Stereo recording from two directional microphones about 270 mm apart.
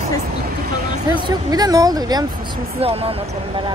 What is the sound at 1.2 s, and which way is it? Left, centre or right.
Speech, centre.